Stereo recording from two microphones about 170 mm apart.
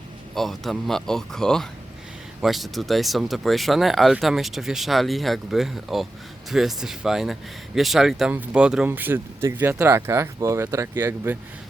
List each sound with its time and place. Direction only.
0.3 s speech: centre (ahead or behind)